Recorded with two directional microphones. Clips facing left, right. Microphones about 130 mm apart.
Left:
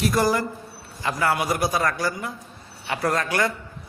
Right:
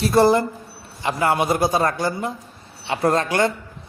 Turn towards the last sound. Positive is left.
turn(degrees=-25)  # may be behind; listen again after turning